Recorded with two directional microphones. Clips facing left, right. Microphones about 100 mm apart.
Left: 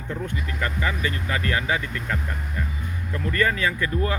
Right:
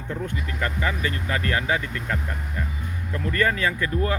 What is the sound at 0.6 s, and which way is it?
Speech, 35° right (ahead or behind).